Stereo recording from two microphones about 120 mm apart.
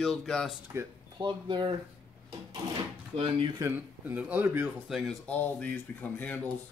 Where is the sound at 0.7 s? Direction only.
20° right (ahead or behind).